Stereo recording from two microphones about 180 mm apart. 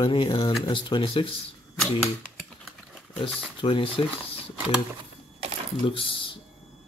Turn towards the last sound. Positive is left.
turn(degrees=30)  # may be behind; listen again after turning